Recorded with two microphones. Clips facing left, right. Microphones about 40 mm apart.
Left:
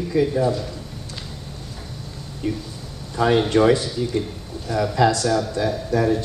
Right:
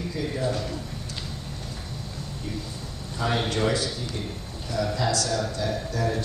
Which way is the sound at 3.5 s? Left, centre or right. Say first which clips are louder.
Left 8 dB; left.